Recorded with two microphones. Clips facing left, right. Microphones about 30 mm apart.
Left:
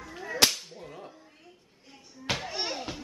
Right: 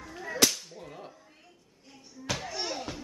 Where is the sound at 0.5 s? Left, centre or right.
Left.